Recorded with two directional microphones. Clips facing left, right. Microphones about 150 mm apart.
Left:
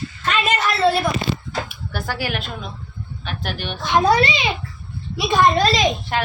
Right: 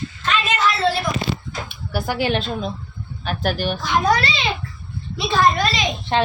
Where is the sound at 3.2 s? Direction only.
40° right (ahead or behind).